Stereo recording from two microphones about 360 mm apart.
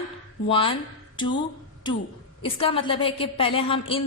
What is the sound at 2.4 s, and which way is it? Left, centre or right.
A woman's voice, centre.